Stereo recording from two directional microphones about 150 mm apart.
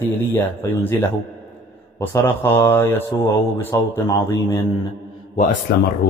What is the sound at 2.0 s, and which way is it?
Speech, 15° left (ahead or behind).